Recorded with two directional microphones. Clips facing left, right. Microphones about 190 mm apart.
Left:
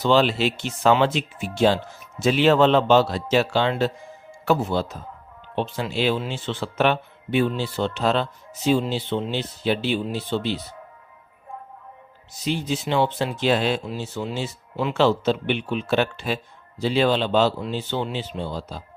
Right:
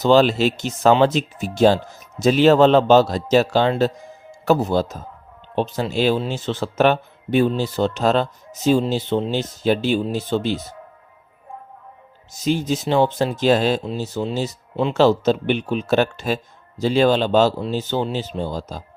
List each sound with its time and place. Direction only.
0.0 s speech: 40° right (ahead or behind)
12.3 s speech: 45° right (ahead or behind)